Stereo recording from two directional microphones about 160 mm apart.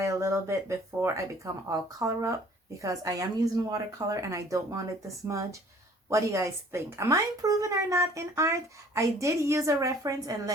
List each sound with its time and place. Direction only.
0.0 s speech: 15° right (ahead or behind)